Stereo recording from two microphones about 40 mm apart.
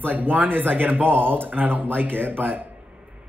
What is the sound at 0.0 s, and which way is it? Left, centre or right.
Speech, right.